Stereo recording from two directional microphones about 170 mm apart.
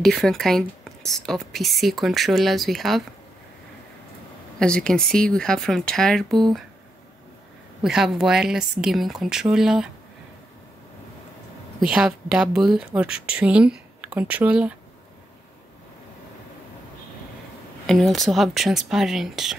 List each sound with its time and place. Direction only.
0.0 s a woman's voice: 5° left (ahead or behind)
4.6 s a woman's voice: 5° left (ahead or behind)
7.8 s a woman's voice: 5° right (ahead or behind)
11.8 s a woman's voice: 5° right (ahead or behind)
17.8 s a woman's voice: centre (ahead or behind)